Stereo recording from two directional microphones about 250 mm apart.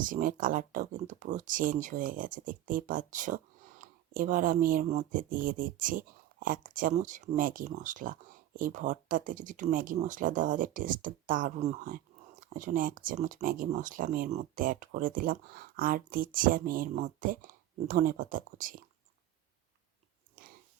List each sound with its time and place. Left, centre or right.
0.0 s speech: right
20.4 s dog: right